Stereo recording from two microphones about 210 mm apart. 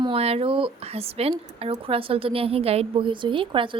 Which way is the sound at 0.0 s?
30° right (ahead or behind).